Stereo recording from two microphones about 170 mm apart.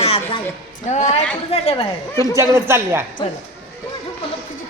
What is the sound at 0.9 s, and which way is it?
A man's voice, 45° left (ahead or behind).